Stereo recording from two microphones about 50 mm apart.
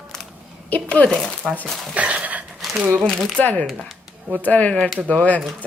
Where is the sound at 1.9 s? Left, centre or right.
Right.